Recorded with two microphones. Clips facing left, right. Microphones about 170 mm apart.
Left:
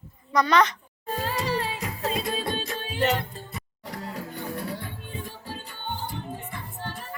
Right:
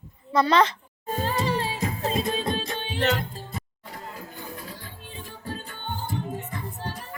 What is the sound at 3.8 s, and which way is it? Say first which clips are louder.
Music: left 4 dB; 90° left.